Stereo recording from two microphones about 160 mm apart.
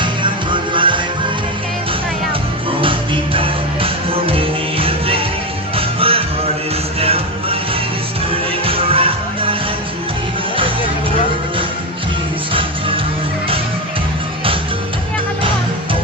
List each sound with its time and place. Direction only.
0.0 s music: 30° right (ahead or behind)
3.3 s music: 35° right (ahead or behind)